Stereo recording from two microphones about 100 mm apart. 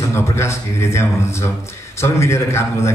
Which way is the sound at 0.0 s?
30° left (ahead or behind).